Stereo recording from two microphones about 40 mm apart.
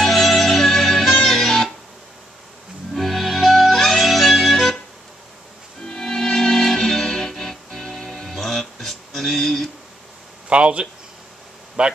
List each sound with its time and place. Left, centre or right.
0.0 s music: centre
2.9 s music: centre
5.9 s music: centre
10.5 s speech: right